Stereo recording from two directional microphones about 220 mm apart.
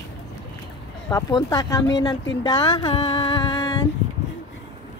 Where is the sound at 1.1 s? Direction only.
15° left (ahead or behind).